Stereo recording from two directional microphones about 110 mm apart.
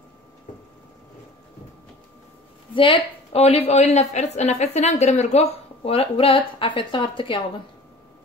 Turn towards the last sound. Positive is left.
turn(degrees=50)  # may be behind; listen again after turning